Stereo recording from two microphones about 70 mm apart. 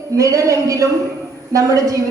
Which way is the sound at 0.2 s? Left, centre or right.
Right.